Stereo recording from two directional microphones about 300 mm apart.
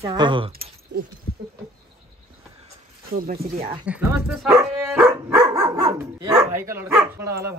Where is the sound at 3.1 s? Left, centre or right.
Right.